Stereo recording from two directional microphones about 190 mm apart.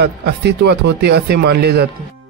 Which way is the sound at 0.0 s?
60° right (ahead or behind).